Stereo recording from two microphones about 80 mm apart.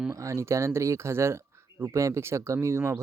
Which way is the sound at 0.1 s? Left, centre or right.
Right.